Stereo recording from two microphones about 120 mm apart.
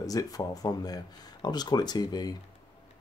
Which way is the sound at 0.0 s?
30° left (ahead or behind).